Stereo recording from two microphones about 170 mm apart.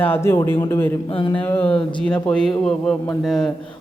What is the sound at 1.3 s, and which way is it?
A man's voice, 10° left (ahead or behind).